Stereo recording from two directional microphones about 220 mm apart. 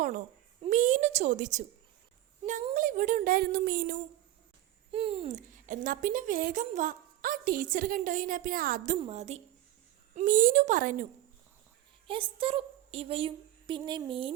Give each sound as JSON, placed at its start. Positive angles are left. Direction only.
{"t": 0.6, "sound": "a woman's voice", "side_deg": -35}
{"t": 4.9, "sound": "a woman's voice", "side_deg": -25}
{"t": 12.0, "sound": "a woman's voice", "side_deg": -25}